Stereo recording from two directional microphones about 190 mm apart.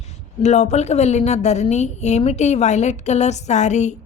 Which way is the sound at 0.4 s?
35° left (ahead or behind).